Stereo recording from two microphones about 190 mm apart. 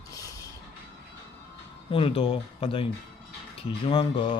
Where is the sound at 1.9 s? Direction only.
30° left (ahead or behind).